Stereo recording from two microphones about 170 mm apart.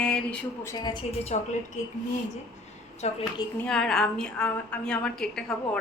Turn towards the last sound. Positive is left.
turn(degrees=5)  # may be behind; listen again after turning